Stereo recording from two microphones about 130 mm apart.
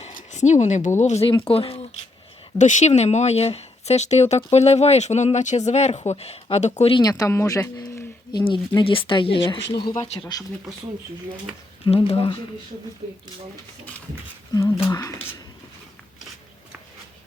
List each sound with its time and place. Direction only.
0.0 s a sound: 80° left
1.0 s speech: 60° left (ahead or behind)
1.3 s speech: 45° left (ahead or behind)
2.6 s speech: 70° left (ahead or behind)
6.9 s speech: 30° left (ahead or behind)
11.9 s speech: 45° left (ahead or behind)
14.8 s speech: 25° left (ahead or behind)